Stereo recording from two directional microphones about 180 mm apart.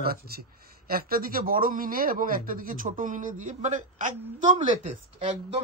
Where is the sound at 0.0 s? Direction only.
60° right (ahead or behind).